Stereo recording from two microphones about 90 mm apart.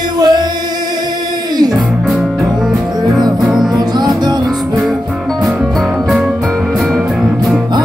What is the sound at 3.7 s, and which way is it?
Music, 50° right (ahead or behind).